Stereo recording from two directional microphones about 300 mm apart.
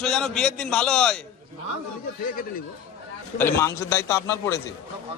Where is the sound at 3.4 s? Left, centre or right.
Centre.